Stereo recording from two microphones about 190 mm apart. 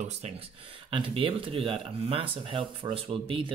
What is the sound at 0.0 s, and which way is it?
Speech, 35° right (ahead or behind).